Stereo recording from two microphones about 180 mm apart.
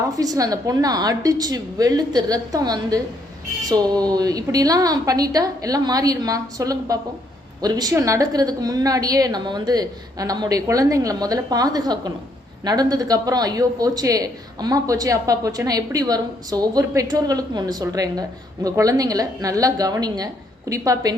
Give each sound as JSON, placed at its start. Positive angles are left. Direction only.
{"t": 0.2, "sound": "speech", "side_deg": -20}